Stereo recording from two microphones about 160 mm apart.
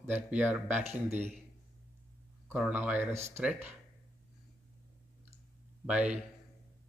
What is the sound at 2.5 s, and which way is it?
Speech, 10° right (ahead or behind).